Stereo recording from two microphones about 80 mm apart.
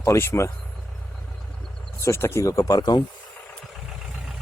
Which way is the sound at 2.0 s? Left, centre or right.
Left.